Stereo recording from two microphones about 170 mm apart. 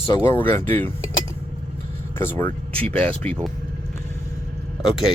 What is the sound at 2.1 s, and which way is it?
Speech, 15° left (ahead or behind).